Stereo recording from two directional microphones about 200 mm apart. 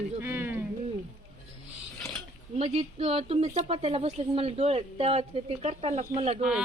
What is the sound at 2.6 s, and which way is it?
A woman's voice, 30° right (ahead or behind).